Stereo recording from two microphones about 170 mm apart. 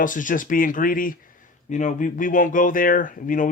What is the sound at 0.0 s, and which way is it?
Speech, 50° left (ahead or behind).